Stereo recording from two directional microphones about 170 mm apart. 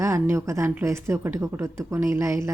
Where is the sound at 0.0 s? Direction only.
15° right (ahead or behind).